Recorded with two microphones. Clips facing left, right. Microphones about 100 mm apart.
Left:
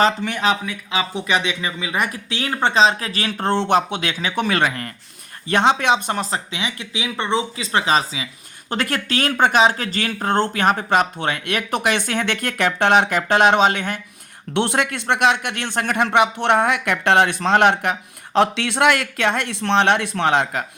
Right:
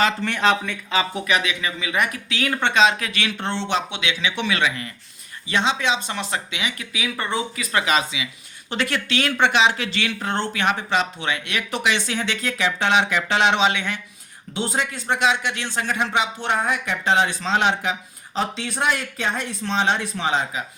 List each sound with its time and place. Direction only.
0.2 s speech: 10° left (ahead or behind)
1.1 s speech: 30° left (ahead or behind); by 6.2 s 50° left (ahead or behind)
6.3 s speech: 35° left (ahead or behind)
8.7 s speech: 45° left (ahead or behind)
14.5 s speech: 65° left (ahead or behind)
18.3 s speech: 85° left; by 20.7 s 65° left (ahead or behind)